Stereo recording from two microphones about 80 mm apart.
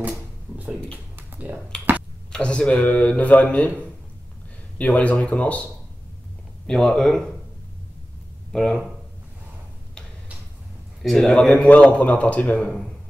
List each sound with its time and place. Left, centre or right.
0.9 s a sound: right
2.3 s a man's voice: centre
4.7 s a man's voice: centre
6.7 s speech: centre
8.5 s speech: centre
11.0 s a man's voice: centre